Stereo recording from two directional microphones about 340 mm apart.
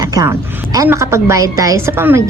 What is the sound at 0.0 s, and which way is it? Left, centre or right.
A woman's voice, centre.